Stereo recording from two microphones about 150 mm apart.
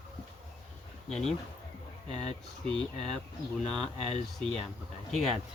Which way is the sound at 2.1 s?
50° left (ahead or behind).